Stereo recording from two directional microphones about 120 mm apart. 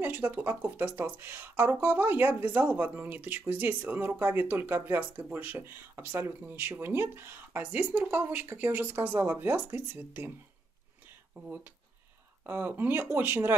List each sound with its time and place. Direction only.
0.0 s speech: 15° right (ahead or behind)
11.1 s a sound: 15° right (ahead or behind)
12.4 s speech: 20° right (ahead or behind)